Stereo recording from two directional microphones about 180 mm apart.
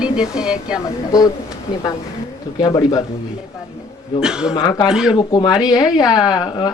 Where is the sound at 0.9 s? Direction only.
20° left (ahead or behind).